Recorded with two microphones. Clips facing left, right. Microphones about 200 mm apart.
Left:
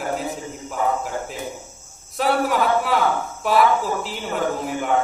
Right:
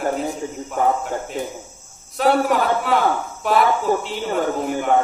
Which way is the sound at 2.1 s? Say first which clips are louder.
Right 3 dB; centre (ahead or behind).